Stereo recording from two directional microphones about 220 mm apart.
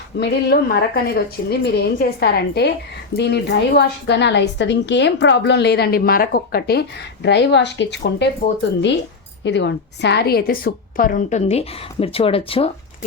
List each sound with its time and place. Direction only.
0.2 s speech: 50° left (ahead or behind)
9.4 s a woman's voice: 55° left (ahead or behind); by 12.7 s 25° left (ahead or behind)